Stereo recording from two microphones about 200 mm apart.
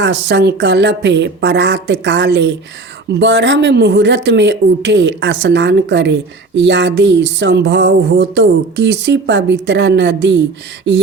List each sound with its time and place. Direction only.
0.0 s speech: 60° right (ahead or behind)